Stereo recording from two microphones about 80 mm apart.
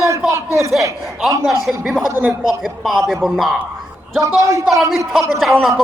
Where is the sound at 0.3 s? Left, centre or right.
Right.